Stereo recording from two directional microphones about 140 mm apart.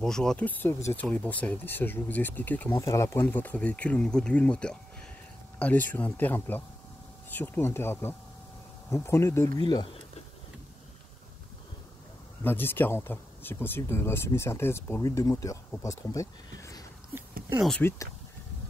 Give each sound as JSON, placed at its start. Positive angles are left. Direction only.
{"t": 0.0, "sound": "speech", "side_deg": 5}
{"t": 9.6, "sound": "speech", "side_deg": 30}
{"t": 12.4, "sound": "speech", "side_deg": 15}